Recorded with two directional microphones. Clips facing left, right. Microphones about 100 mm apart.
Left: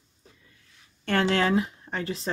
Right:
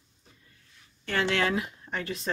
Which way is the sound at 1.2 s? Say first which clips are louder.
Left 3 dB; 30° left (ahead or behind).